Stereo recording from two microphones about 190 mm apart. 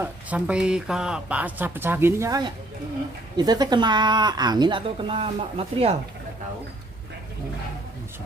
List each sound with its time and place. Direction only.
0.0 s speech: 5° right (ahead or behind); by 5.9 s 30° right (ahead or behind)